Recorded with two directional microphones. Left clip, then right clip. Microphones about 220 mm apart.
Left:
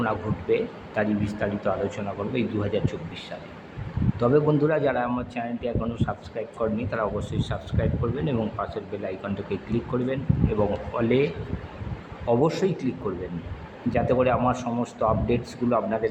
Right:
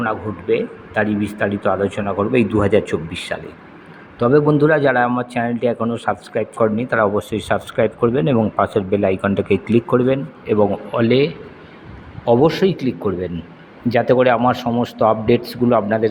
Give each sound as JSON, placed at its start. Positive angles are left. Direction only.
{"t": 0.0, "sound": "a man's voice", "side_deg": -10}
{"t": 4.2, "sound": "a man's voice", "side_deg": -15}